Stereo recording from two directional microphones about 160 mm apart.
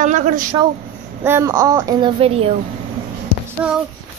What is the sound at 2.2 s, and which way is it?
Speech, 35° right (ahead or behind).